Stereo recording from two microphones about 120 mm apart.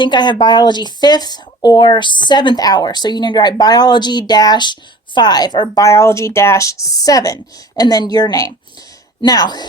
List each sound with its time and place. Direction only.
0.0 s speech: 40° left (ahead or behind)